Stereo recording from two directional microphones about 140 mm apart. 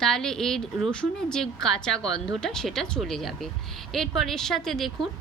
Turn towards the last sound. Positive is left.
turn(degrees=0)  # may be behind; listen again after turning